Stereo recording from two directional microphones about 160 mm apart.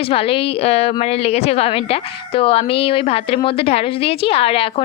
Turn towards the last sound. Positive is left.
turn(degrees=35)  # may be behind; listen again after turning